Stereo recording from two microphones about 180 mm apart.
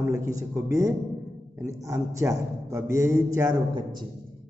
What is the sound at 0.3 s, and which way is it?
A man's voice, 20° right (ahead or behind).